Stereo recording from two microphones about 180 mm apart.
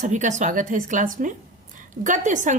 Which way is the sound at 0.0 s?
40° right (ahead or behind).